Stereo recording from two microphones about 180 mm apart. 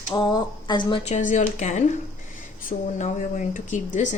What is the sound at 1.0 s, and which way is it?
A woman's voice, 40° left (ahead or behind).